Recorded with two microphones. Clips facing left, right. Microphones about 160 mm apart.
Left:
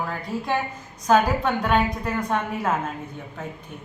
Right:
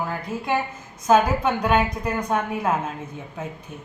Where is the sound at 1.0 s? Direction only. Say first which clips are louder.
Right 1 dB; 5° right (ahead or behind).